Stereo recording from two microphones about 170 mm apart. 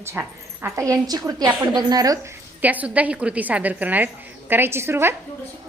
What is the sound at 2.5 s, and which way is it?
A woman's voice, 10° right (ahead or behind).